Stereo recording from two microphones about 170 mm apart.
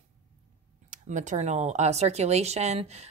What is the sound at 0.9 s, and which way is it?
Speech, 45° right (ahead or behind).